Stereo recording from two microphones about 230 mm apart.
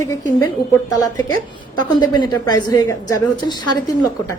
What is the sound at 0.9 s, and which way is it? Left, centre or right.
A woman's voice, centre.